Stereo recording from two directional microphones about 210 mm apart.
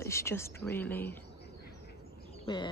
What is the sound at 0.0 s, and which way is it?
A woman's voice, 15° left (ahead or behind).